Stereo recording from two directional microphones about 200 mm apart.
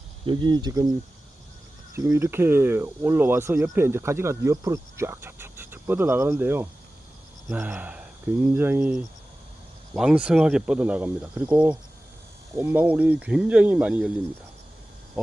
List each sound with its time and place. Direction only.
0.3 s speech: 25° right (ahead or behind)
2.0 s speech: 15° right (ahead or behind)